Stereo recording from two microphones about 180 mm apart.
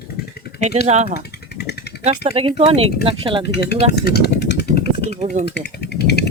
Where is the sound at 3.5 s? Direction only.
65° left (ahead or behind).